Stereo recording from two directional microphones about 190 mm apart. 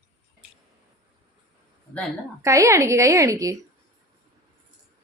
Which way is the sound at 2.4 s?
15° right (ahead or behind).